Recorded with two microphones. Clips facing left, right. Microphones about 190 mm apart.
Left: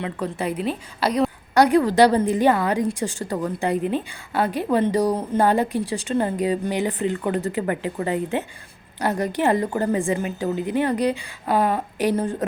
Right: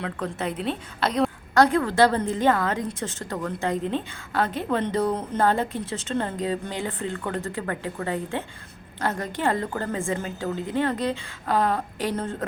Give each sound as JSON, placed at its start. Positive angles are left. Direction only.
{"t": 0.0, "sound": "a woman's voice", "side_deg": 10}